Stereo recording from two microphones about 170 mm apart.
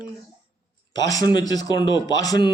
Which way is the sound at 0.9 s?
20° left (ahead or behind).